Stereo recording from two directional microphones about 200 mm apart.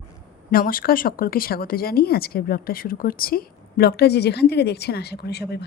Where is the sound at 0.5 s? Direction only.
45° left (ahead or behind).